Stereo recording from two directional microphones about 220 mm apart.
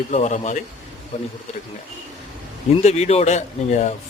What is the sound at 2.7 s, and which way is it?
Speech, 30° left (ahead or behind).